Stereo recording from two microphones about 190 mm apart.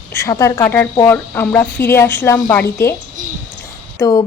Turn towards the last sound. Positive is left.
turn(degrees=20)  # may be behind; listen again after turning